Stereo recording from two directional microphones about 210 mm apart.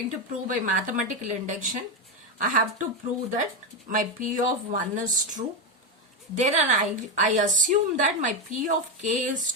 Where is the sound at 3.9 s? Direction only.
40° right (ahead or behind).